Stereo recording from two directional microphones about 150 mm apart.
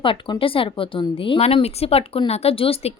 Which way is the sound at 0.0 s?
35° left (ahead or behind).